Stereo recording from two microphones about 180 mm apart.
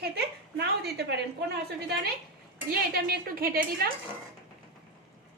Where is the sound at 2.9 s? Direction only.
60° right (ahead or behind).